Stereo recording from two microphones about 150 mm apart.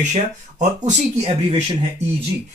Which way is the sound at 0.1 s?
55° right (ahead or behind).